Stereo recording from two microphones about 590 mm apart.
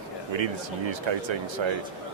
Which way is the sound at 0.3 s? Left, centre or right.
Right.